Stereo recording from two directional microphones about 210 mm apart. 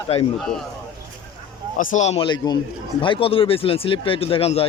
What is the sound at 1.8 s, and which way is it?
Speech, 35° left (ahead or behind).